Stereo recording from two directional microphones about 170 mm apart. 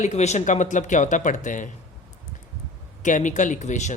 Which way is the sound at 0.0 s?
40° left (ahead or behind).